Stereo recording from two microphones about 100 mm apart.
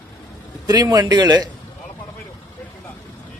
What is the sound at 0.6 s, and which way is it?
Speech, 40° right (ahead or behind).